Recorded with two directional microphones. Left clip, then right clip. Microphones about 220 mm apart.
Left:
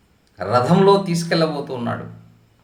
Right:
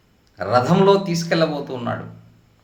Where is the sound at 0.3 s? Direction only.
5° right (ahead or behind).